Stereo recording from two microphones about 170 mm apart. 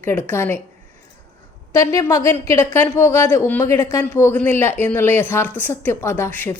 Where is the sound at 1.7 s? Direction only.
20° left (ahead or behind).